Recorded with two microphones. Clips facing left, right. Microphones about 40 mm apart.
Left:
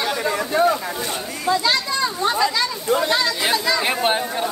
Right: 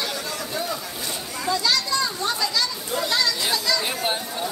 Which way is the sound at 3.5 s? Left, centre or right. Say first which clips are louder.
Left 4 dB; left.